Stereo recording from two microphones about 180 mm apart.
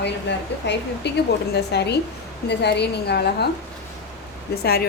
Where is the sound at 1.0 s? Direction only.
70° left (ahead or behind).